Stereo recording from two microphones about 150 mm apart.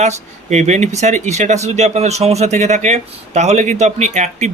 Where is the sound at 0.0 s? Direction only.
50° right (ahead or behind).